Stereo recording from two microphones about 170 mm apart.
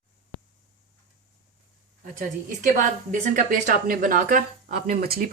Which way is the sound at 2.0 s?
50° right (ahead or behind).